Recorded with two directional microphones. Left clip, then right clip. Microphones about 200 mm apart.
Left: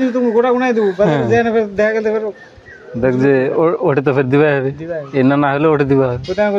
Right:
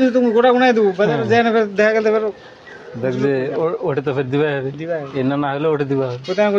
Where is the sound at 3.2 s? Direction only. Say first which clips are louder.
Left 5 dB; 55° left (ahead or behind).